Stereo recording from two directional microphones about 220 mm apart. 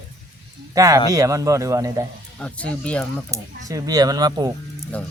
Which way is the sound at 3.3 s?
15° right (ahead or behind).